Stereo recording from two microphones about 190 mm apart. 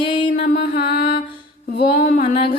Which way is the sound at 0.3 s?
50° left (ahead or behind).